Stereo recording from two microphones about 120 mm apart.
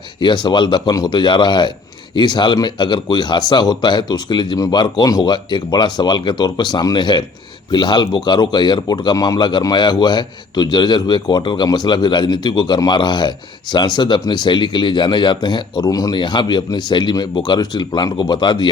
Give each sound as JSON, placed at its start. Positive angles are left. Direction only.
{"t": 0.2, "sound": "a man's voice", "side_deg": 40}